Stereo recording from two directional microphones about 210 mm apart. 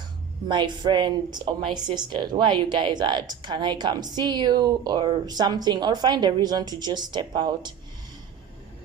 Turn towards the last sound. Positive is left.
turn(degrees=-20)  # may be behind; listen again after turning